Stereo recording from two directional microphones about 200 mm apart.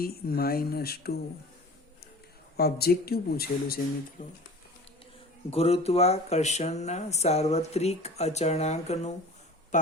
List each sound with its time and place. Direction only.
0.0 s speech: 50° left (ahead or behind)
2.6 s speech: 50° left (ahead or behind)
5.5 s speech: 30° left (ahead or behind)